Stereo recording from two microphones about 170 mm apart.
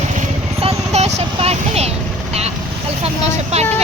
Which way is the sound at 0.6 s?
40° right (ahead or behind).